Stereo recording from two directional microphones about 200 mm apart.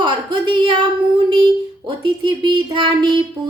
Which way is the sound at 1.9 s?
25° right (ahead or behind).